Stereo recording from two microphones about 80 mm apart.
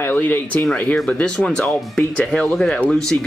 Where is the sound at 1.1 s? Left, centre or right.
Centre.